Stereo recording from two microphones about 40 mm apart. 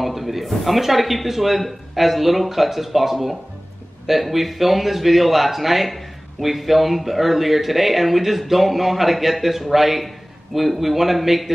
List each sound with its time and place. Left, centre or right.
0.0 s speech: centre